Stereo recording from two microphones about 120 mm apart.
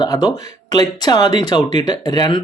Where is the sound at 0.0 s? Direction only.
30° left (ahead or behind).